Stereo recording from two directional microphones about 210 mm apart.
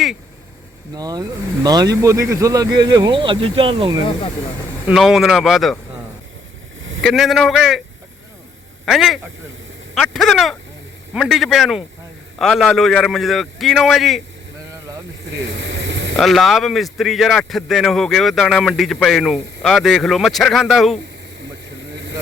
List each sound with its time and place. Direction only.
0.9 s speech: 20° right (ahead or behind)
4.9 s speech: centre (ahead or behind)
7.0 s speech: centre (ahead or behind)
8.8 s speech: centre (ahead or behind)
15.3 s vehicle: 60° right (ahead or behind)
16.1 s speech: centre (ahead or behind)
21.9 s vehicle: 55° right (ahead or behind)